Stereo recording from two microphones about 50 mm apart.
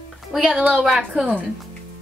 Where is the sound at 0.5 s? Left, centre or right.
Right.